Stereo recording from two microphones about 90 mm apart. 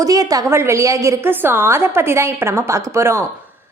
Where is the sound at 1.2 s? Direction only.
25° right (ahead or behind).